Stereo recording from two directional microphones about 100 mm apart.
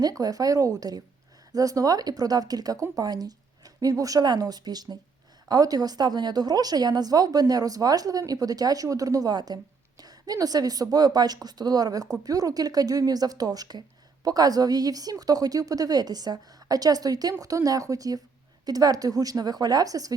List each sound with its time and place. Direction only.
0.0 s speech: 40° right (ahead or behind)